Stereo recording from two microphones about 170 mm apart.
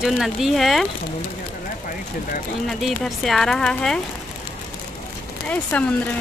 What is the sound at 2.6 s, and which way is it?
Speech, centre (ahead or behind).